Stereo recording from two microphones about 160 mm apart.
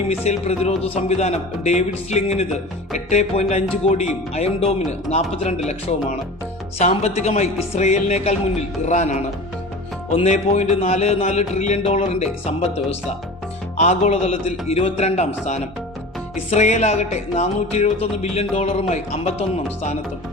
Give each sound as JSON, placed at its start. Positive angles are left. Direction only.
{"t": 0.3, "sound": "a man's voice", "side_deg": 40}
{"t": 4.4, "sound": "music", "side_deg": 40}
{"t": 6.7, "sound": "a man's voice", "side_deg": 45}
{"t": 16.5, "sound": "music", "side_deg": 45}